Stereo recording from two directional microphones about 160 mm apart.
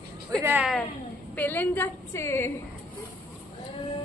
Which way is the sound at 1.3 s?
10° left (ahead or behind).